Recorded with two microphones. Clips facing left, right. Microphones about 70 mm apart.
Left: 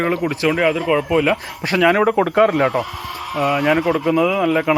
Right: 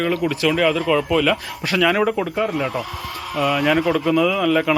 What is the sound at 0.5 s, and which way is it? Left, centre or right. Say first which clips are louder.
Speech: left 1 dB; centre.